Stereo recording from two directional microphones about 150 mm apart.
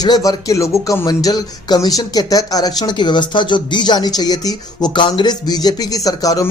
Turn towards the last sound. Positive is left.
turn(degrees=25)  # may be behind; listen again after turning